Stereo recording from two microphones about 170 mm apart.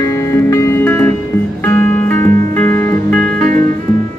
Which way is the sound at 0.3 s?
15° left (ahead or behind).